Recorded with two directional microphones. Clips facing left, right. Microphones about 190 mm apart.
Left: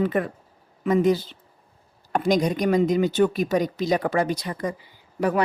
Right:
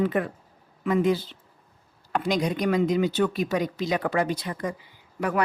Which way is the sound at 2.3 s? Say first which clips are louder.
Left 4 dB; 45° left (ahead or behind).